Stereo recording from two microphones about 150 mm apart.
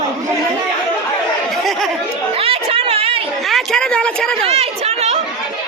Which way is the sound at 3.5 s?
Centre (ahead or behind).